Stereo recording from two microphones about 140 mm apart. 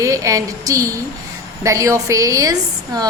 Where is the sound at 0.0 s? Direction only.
25° right (ahead or behind).